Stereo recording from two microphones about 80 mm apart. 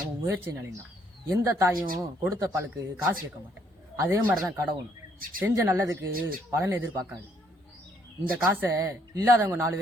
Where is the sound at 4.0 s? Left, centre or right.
Right.